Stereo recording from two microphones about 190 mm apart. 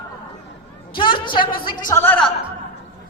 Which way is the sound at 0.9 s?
25° left (ahead or behind).